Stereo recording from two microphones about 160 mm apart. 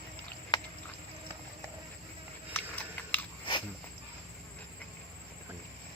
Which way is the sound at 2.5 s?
10° left (ahead or behind).